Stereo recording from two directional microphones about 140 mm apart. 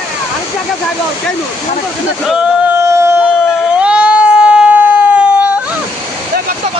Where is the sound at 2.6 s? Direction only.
20° right (ahead or behind).